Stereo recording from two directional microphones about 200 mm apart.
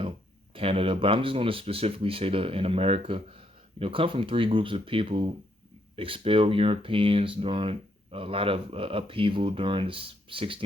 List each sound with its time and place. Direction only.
0.5 s speech: 25° right (ahead or behind)